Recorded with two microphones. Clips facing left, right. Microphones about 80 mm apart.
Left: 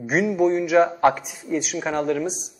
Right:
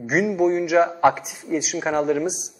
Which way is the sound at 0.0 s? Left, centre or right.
Centre.